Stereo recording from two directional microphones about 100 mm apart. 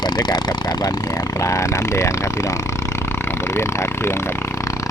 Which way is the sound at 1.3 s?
30° left (ahead or behind).